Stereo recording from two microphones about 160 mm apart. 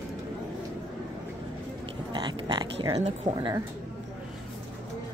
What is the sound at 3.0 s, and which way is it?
Speech, 45° right (ahead or behind).